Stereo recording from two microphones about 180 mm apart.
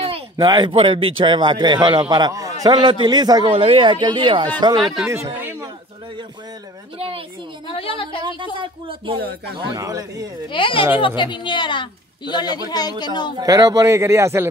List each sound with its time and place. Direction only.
0.0 s a sound: 30° right (ahead or behind)
0.5 s a man's voice: 25° right (ahead or behind)
5.0 s speech: 15° right (ahead or behind)
7.7 s a sound: 30° left (ahead or behind)
8.5 s a man's voice: 30° right (ahead or behind)
10.5 s a woman's voice: 30° left (ahead or behind)
13.4 s speech: 20° right (ahead or behind)